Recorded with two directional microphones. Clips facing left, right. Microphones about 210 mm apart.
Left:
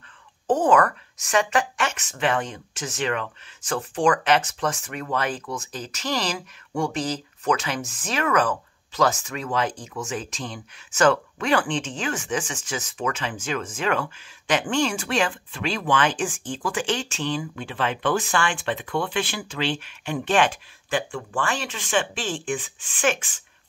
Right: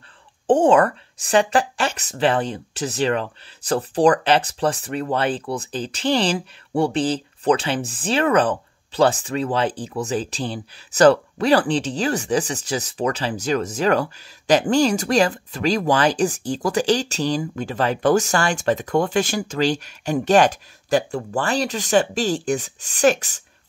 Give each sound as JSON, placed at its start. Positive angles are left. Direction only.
{"t": 0.5, "sound": "speech", "side_deg": -30}